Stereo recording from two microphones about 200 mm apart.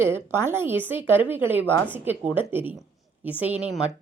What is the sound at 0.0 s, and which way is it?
Speech, 10° right (ahead or behind).